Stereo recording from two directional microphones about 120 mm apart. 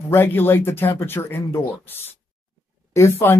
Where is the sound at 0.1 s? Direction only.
20° left (ahead or behind).